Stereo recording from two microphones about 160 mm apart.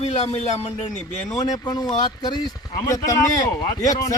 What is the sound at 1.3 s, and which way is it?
Speech, 25° left (ahead or behind).